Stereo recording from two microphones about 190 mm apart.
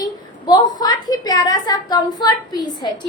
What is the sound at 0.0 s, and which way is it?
A woman's voice, 20° left (ahead or behind).